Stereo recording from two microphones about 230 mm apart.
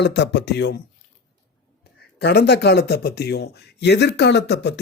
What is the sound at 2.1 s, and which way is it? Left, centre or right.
Speech, left.